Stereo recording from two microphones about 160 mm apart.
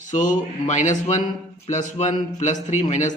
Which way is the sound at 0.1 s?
50° left (ahead or behind).